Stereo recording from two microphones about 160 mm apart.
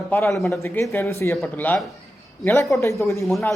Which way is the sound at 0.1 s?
15° left (ahead or behind).